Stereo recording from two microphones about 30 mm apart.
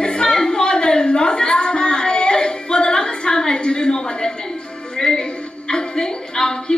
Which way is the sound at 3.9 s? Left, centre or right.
Left.